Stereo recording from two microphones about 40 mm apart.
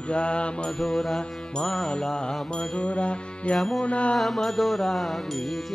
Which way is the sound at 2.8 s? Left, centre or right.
Left.